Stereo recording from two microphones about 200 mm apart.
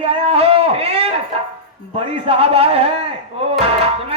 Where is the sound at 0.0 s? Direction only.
30° right (ahead or behind).